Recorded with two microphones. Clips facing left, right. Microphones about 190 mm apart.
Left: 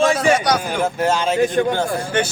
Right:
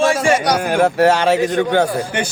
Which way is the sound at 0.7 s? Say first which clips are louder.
Right 6 dB; 70° right (ahead or behind).